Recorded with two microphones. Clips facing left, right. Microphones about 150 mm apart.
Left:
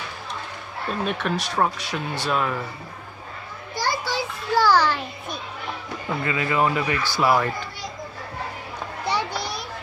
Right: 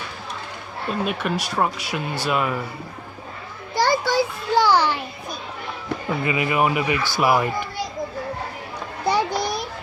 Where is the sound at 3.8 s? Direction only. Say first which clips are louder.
Right 6 dB; 60° right (ahead or behind).